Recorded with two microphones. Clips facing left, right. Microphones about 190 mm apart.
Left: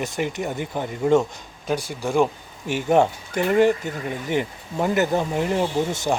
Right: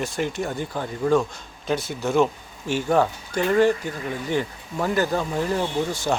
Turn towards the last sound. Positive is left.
turn(degrees=20)  # may be behind; listen again after turning